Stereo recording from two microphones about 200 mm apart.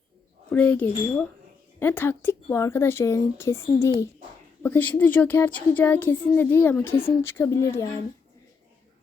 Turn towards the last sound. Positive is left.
turn(degrees=15)  # may be behind; listen again after turning